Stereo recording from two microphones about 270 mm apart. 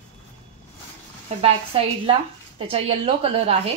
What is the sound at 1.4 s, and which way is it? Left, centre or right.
A woman's voice, right.